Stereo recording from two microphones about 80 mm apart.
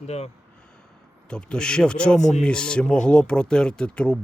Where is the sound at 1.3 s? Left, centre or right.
Centre.